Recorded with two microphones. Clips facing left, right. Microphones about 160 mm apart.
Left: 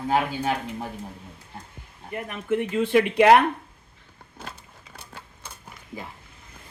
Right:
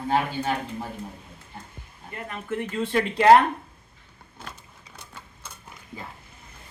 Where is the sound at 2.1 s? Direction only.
20° left (ahead or behind).